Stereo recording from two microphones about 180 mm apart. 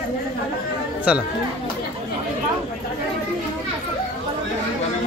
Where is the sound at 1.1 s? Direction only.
5° right (ahead or behind).